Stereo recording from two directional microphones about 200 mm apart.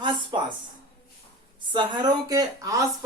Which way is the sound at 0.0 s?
20° right (ahead or behind).